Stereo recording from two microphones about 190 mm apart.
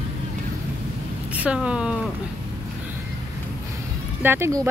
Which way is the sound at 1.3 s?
5° right (ahead or behind).